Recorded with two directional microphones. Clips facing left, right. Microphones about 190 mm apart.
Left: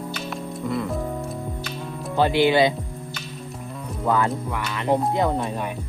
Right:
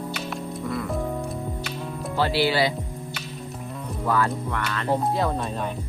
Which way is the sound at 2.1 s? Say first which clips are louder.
Left 4 dB; 20° left (ahead or behind).